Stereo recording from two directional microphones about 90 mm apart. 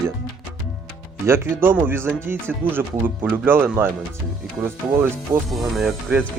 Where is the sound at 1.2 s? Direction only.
25° right (ahead or behind).